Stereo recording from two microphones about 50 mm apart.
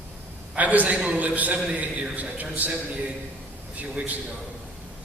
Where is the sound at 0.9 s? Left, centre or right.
Right.